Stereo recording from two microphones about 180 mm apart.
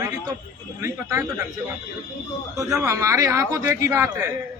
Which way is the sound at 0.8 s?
15° right (ahead or behind).